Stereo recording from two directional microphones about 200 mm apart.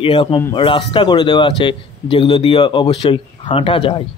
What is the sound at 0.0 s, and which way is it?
Speech, 25° left (ahead or behind).